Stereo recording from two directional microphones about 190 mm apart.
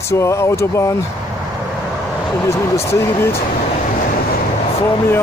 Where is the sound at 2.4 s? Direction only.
15° left (ahead or behind).